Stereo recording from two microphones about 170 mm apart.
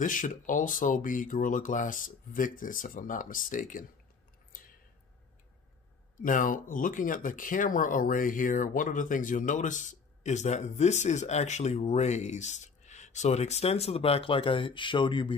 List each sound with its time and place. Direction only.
0.0 s speech: 50° left (ahead or behind)
6.2 s speech: 50° left (ahead or behind); by 15.3 s 30° left (ahead or behind)